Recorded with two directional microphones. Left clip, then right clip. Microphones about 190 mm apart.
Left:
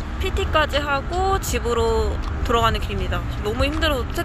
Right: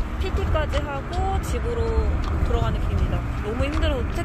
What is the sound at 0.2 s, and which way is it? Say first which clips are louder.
Speech: left 7 dB; 5° left (ahead or behind).